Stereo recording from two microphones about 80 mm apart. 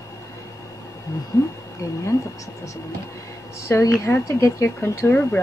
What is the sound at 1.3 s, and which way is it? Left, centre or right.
Speech, left.